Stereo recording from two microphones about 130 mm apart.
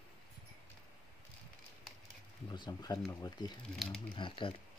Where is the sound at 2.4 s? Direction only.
35° left (ahead or behind).